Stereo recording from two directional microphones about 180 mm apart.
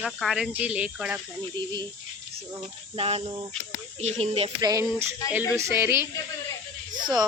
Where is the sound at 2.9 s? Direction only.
30° right (ahead or behind).